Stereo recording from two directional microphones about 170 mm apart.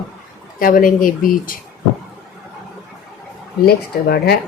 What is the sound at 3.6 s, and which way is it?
Speech, 65° left (ahead or behind).